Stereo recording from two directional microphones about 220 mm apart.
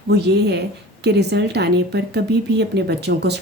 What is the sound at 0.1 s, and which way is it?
Speech, 50° right (ahead or behind).